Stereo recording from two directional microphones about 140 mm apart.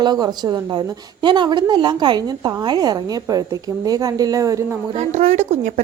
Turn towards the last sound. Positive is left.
turn(degrees=-55)  # may be behind; listen again after turning